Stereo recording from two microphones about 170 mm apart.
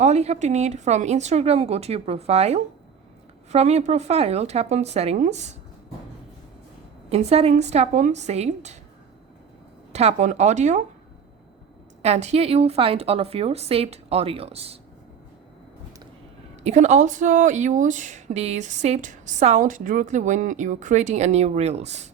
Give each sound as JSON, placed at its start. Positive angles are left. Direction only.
{"t": 0.0, "sound": "a woman's voice", "side_deg": -40}
{"t": 7.1, "sound": "a woman's voice", "side_deg": -40}
{"t": 9.9, "sound": "speech", "side_deg": -40}
{"t": 12.0, "sound": "a woman's voice", "side_deg": -40}
{"t": 16.6, "sound": "speech", "side_deg": -40}